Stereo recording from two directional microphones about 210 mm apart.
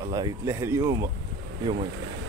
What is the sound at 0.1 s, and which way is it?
Speech, 15° right (ahead or behind).